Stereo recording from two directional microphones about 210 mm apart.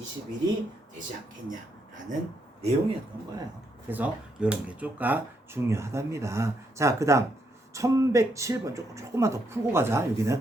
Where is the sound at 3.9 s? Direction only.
10° right (ahead or behind).